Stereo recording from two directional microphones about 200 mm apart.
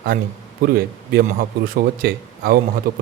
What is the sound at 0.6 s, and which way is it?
A man's voice, 50° right (ahead or behind).